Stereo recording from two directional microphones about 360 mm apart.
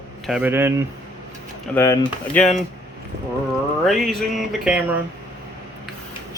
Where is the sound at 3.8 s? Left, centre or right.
Centre.